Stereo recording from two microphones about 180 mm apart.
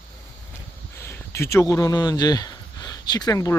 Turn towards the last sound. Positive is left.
turn(degrees=20)  # may be behind; listen again after turning